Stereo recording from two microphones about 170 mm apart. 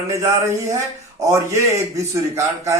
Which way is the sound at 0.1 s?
20° right (ahead or behind).